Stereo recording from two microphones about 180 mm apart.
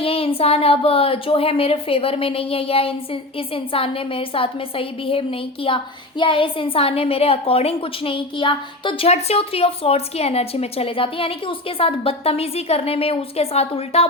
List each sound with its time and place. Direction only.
0.0 s speech: 30° left (ahead or behind)